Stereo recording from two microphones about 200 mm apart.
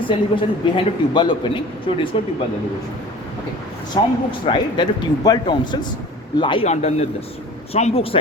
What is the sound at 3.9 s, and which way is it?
A man's voice, 20° left (ahead or behind).